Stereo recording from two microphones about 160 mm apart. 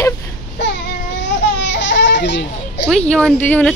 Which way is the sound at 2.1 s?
90° left.